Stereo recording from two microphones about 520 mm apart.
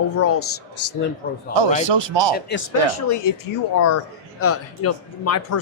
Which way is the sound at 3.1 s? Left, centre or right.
Left.